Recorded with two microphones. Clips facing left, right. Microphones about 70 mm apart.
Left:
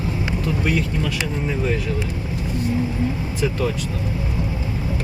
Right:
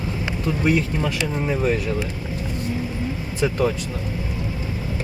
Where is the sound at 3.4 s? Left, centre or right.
Right.